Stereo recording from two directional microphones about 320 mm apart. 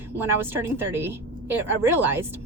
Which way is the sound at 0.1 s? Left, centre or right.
Centre.